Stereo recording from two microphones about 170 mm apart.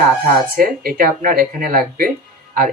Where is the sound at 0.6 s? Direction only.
55° right (ahead or behind).